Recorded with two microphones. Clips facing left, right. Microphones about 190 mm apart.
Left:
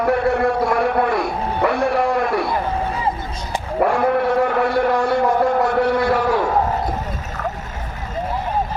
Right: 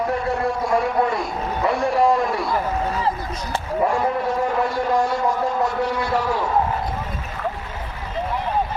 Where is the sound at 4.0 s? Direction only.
65° left (ahead or behind).